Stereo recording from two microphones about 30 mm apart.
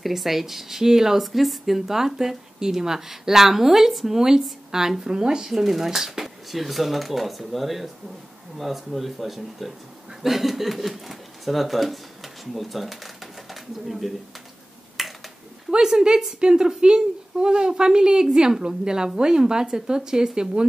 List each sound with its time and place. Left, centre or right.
0.0 s speech: centre
1.2 s a woman's voice: centre; by 5.4 s right
5.5 s speech: centre
15.0 s finger snapping: centre
15.7 s a woman's voice: right